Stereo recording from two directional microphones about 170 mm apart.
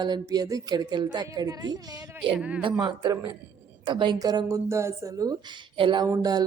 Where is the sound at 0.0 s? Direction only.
25° right (ahead or behind).